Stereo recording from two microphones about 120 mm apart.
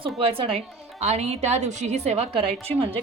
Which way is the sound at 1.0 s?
70° right (ahead or behind).